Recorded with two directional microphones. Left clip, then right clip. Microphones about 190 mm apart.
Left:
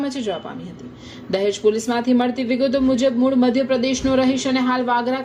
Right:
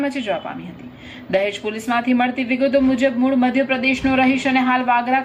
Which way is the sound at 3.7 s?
40° left (ahead or behind).